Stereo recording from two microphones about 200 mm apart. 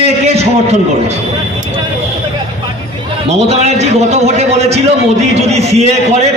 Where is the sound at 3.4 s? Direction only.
35° right (ahead or behind).